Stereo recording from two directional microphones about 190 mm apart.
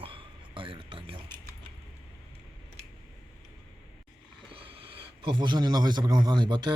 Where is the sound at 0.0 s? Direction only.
30° right (ahead or behind).